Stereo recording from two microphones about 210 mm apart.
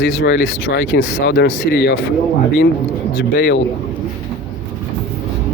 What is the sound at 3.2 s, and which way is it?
Speech, 55° left (ahead or behind).